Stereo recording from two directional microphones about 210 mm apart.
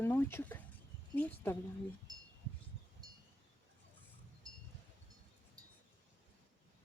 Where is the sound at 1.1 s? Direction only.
10° left (ahead or behind).